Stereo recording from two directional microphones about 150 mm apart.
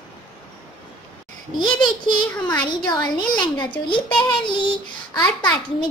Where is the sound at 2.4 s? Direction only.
5° left (ahead or behind).